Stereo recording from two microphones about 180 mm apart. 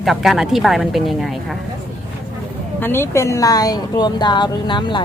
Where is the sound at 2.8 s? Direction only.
10° left (ahead or behind).